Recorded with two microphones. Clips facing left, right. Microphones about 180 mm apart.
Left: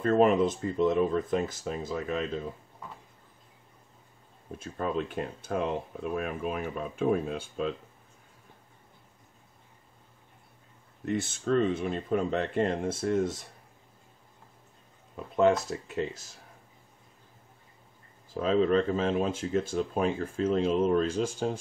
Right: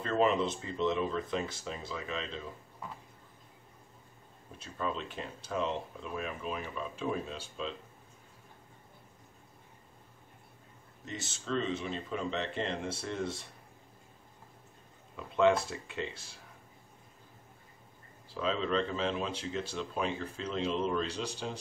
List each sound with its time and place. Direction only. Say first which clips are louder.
0.0 s speech: left 6 dB; 50° left (ahead or behind)
4.5 s speech: left 4 dB; 50° left (ahead or behind)
11.1 s speech: left 10 dB; 55° left (ahead or behind)
15.1 s speech: left 3 dB; 40° left (ahead or behind)
18.3 s speech: left 7 dB; 45° left (ahead or behind)